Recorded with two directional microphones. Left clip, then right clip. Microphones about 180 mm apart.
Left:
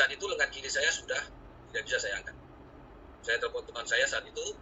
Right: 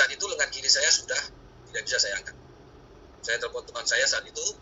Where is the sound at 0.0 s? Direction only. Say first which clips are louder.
Right 3 dB; 15° right (ahead or behind).